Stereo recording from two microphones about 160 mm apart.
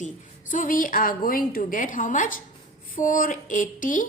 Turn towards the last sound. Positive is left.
turn(degrees=55)  # may be behind; listen again after turning